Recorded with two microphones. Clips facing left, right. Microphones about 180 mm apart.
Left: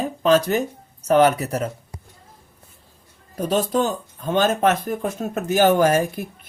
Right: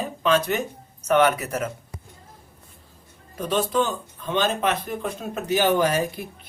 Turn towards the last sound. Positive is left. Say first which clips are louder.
# left 4 dB
turn(degrees=50)  # may be behind; listen again after turning